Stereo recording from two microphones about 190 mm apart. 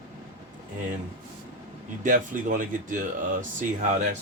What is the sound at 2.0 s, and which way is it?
Speech, 45° right (ahead or behind).